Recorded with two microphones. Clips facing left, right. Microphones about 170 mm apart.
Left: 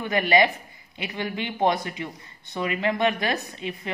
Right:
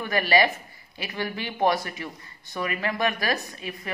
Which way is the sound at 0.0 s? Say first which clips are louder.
Left 1 dB; 20° left (ahead or behind).